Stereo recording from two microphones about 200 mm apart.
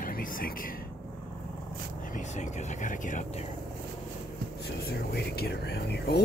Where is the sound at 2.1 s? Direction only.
40° left (ahead or behind).